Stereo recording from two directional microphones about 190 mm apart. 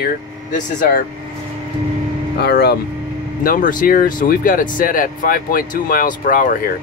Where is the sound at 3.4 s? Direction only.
45° left (ahead or behind).